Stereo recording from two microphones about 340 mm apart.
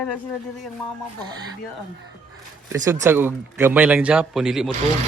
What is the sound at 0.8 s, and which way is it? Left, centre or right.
Speech, left.